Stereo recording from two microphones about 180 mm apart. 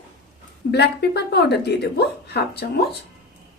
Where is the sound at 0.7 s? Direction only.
65° left (ahead or behind).